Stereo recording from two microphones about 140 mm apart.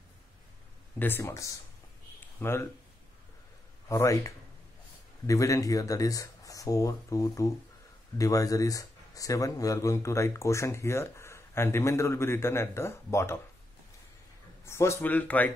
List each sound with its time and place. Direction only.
0.9 s speech: 15° left (ahead or behind)
2.1 s a sound: 15° left (ahead or behind)
3.9 s speech: 20° left (ahead or behind)
14.6 s speech: 20° left (ahead or behind)